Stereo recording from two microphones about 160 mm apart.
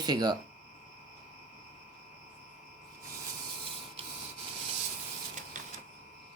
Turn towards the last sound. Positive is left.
turn(degrees=-50)  # may be behind; listen again after turning